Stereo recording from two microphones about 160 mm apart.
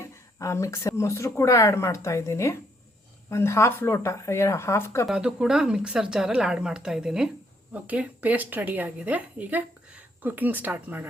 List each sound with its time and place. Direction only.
0.0 s speech: 20° left (ahead or behind)
5.0 s speech: 5° right (ahead or behind)